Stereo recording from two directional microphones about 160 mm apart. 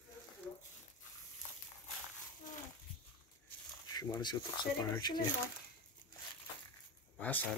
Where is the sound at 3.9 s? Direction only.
25° left (ahead or behind).